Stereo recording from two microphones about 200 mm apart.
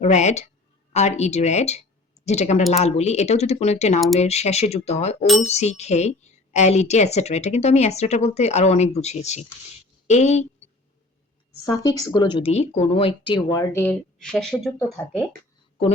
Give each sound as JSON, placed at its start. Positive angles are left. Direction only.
{"t": 0.0, "sound": "speech", "side_deg": 35}
{"t": 11.6, "sound": "speech", "side_deg": 15}